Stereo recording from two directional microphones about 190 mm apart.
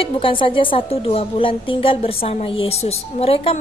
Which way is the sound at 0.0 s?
25° left (ahead or behind).